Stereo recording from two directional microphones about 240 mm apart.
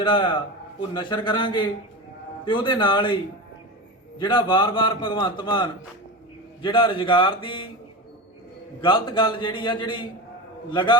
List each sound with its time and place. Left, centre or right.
0.0 s a man's voice: left
4.2 s a man's voice: centre
8.8 s a man's voice: left